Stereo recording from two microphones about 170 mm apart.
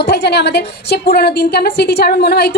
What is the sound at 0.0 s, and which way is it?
A woman's voice, 75° left (ahead or behind).